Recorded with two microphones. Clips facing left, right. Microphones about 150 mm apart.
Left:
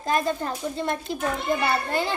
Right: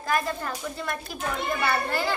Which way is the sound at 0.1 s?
25° left (ahead or behind).